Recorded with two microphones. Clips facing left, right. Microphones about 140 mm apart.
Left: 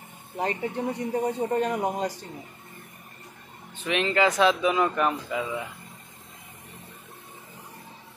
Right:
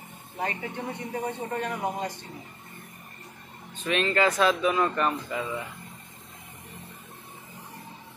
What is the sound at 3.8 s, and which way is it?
Speech, 15° left (ahead or behind).